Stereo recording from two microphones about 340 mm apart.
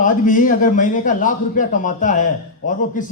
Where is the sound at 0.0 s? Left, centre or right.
Left.